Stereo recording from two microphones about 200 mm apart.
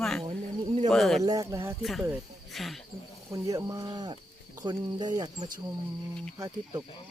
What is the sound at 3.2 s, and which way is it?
Speech, 15° right (ahead or behind).